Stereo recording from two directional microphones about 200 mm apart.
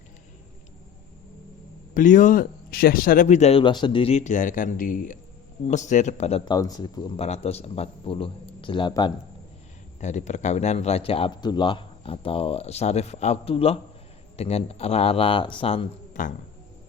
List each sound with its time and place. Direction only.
1.9 s speech: 40° left (ahead or behind); by 7.3 s 20° left (ahead or behind)
7.3 s speech: 30° left (ahead or behind)
10.0 s speech: 35° left (ahead or behind)